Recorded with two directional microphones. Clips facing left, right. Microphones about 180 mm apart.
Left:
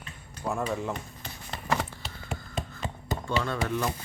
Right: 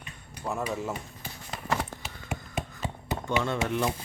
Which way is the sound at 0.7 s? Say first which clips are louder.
Left 1 dB; 5° right (ahead or behind).